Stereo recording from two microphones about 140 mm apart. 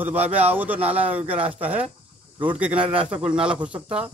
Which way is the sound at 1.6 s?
10° right (ahead or behind).